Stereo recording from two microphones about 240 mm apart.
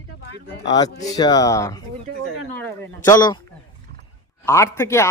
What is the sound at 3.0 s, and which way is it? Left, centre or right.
Speech, centre.